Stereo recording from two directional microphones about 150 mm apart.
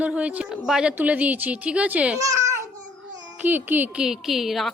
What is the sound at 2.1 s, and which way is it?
Babbling, 20° right (ahead or behind).